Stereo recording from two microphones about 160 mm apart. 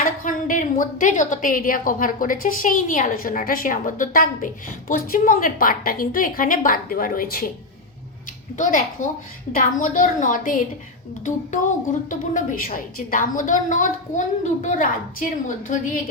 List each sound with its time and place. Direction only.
0.0 s a woman's voice: 55° left (ahead or behind)
8.5 s a woman's voice: 55° left (ahead or behind)